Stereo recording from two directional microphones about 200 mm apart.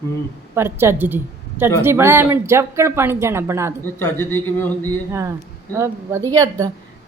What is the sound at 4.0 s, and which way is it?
Speech, 10° left (ahead or behind).